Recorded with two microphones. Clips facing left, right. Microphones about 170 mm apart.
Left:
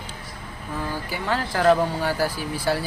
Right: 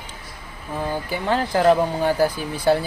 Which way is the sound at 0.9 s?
20° right (ahead or behind).